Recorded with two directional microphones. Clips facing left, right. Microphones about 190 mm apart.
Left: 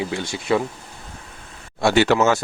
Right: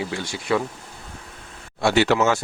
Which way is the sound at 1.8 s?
45° left (ahead or behind).